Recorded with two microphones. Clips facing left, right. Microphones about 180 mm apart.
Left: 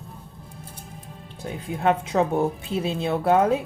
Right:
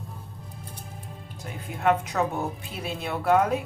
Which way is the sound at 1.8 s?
30° left (ahead or behind).